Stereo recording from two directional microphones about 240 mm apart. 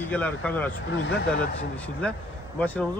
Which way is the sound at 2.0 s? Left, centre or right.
Centre.